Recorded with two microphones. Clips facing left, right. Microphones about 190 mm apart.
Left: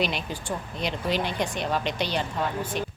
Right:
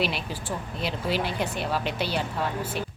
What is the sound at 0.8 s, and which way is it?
A woman's voice, 5° right (ahead or behind).